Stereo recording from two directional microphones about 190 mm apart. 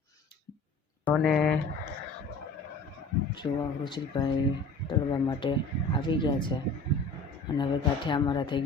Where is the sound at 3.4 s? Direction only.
25° left (ahead or behind).